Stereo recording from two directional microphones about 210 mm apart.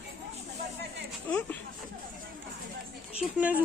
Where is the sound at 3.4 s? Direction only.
5° right (ahead or behind).